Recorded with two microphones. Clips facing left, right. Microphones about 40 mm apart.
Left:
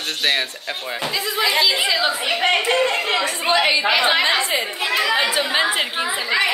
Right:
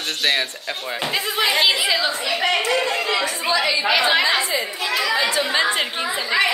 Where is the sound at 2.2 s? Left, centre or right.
Left.